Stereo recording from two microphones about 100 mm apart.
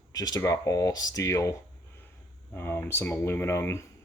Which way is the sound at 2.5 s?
20° left (ahead or behind).